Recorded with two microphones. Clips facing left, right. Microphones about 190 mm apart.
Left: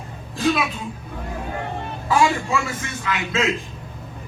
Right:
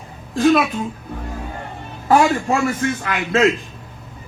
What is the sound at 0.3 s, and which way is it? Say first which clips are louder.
Speech: right 6 dB; 55° right (ahead or behind).